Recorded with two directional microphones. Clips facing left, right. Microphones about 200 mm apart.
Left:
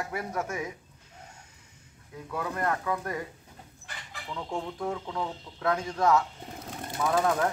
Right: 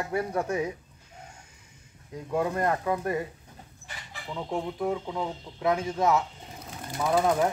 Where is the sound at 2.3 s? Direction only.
25° right (ahead or behind).